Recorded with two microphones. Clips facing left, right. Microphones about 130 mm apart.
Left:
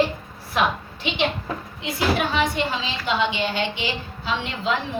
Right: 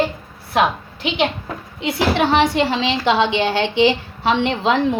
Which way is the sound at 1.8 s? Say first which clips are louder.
Right 5 dB; 75° right (ahead or behind).